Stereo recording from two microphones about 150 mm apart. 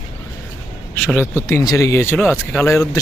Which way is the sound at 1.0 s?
10° left (ahead or behind).